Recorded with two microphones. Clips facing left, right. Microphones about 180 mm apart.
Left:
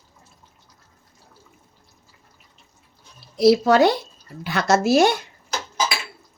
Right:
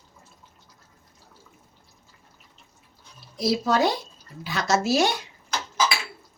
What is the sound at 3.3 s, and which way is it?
Speech, 70° left (ahead or behind).